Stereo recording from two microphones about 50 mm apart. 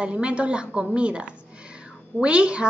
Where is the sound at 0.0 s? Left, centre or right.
Right.